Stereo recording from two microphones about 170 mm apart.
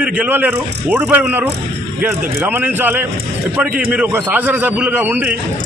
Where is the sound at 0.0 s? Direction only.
10° right (ahead or behind).